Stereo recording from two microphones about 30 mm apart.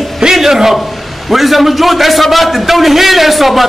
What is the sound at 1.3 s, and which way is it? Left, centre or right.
A man's voice, centre.